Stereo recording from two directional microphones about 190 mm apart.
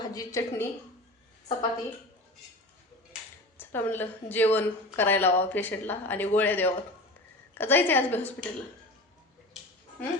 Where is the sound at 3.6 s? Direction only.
10° left (ahead or behind).